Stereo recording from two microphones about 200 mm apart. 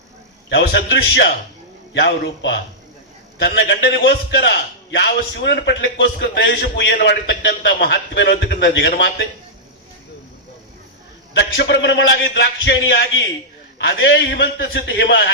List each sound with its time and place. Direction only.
0.5 s a man's voice: 60° left (ahead or behind)
11.3 s a man's voice: 60° left (ahead or behind)